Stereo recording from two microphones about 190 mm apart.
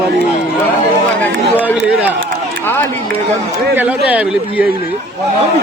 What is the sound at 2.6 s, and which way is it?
Speech, 10° left (ahead or behind).